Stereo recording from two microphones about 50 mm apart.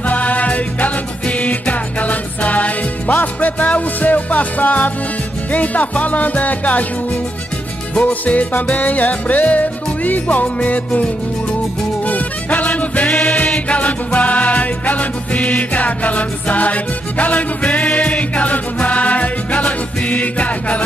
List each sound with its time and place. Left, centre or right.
0.1 s music: left
8.0 s music: left
12.1 s music: left